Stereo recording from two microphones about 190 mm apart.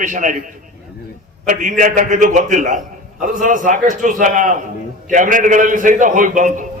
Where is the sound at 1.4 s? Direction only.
45° right (ahead or behind).